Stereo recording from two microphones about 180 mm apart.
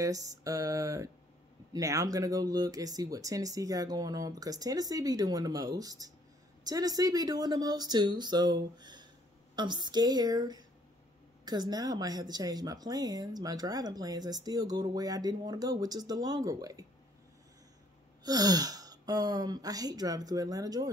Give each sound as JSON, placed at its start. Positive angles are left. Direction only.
{"t": 0.0, "sound": "speech", "side_deg": -20}
{"t": 18.2, "sound": "speech", "side_deg": -20}